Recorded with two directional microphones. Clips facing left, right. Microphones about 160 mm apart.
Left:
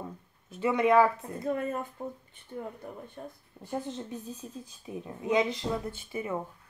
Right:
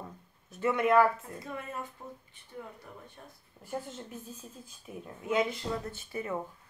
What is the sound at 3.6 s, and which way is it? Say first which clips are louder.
A woman's voice: left 4 dB; 20° left (ahead or behind).